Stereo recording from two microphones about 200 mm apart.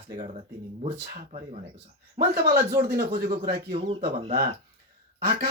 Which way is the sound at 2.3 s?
50° right (ahead or behind).